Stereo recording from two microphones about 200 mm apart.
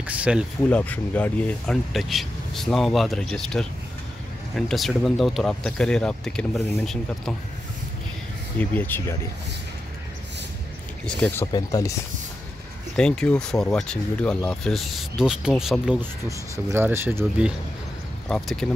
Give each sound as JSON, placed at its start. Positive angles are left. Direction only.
{"t": 0.0, "sound": "a sound", "side_deg": -5}
{"t": 0.7, "sound": "speech", "side_deg": 10}
{"t": 8.5, "sound": "speech", "side_deg": 10}
{"t": 11.1, "sound": "speech", "side_deg": 10}
{"t": 11.5, "sound": "speech", "side_deg": 20}
{"t": 12.9, "sound": "speech", "side_deg": 5}
{"t": 18.3, "sound": "speech", "side_deg": 0}